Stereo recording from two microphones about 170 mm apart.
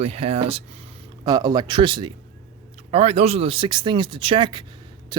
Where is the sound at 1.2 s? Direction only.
20° right (ahead or behind).